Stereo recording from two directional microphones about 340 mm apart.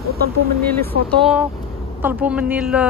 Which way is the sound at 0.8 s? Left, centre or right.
Centre.